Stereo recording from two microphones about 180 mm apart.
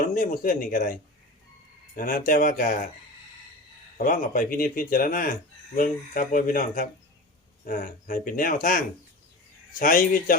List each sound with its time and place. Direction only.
0.0 s speech: 50° left (ahead or behind)
2.0 s speech: 50° left (ahead or behind)
3.9 s speech: 50° left (ahead or behind)